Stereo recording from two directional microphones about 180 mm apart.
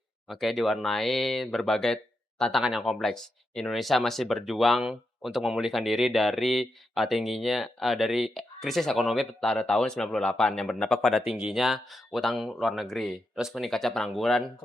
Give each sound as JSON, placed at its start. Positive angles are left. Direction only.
{"t": 0.3, "sound": "speech", "side_deg": 0}